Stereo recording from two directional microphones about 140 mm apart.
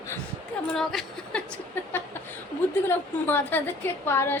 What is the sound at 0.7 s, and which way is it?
Speech, centre (ahead or behind).